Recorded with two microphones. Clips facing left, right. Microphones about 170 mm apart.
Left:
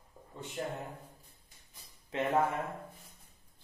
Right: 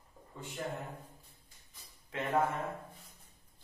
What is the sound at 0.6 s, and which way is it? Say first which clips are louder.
Speech: left 2 dB; 30° left (ahead or behind).